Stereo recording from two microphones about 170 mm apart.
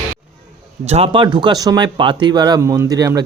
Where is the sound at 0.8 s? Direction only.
35° right (ahead or behind).